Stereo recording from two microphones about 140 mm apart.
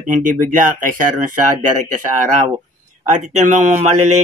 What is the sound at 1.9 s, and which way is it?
Speech, 65° right (ahead or behind).